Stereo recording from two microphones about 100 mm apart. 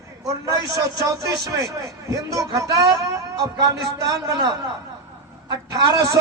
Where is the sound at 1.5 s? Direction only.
30° right (ahead or behind).